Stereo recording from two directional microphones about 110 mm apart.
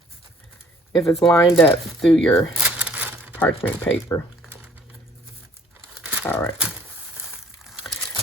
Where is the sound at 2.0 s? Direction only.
5° left (ahead or behind).